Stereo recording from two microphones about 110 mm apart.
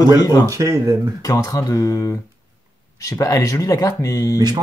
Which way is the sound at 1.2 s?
30° left (ahead or behind).